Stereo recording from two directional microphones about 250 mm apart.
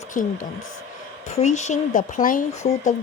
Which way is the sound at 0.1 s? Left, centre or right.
Left.